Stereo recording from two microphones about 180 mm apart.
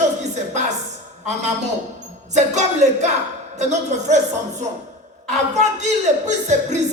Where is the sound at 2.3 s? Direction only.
40° right (ahead or behind).